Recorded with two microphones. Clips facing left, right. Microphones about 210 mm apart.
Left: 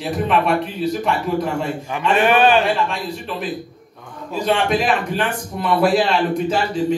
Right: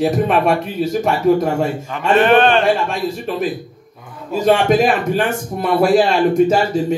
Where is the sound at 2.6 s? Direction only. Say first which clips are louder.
Right 4 dB; 45° right (ahead or behind).